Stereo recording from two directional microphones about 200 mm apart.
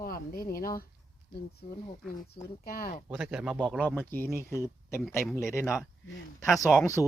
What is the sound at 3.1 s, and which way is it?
Speech, centre (ahead or behind).